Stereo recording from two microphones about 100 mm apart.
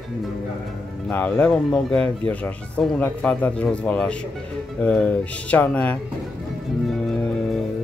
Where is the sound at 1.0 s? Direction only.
15° left (ahead or behind).